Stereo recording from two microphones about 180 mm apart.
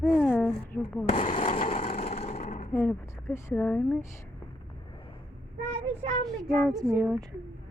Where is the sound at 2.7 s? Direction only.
10° left (ahead or behind).